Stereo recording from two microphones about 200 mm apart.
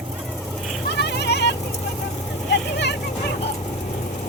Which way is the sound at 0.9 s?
60° left (ahead or behind).